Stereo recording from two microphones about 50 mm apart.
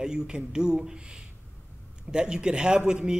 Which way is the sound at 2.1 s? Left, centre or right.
Centre.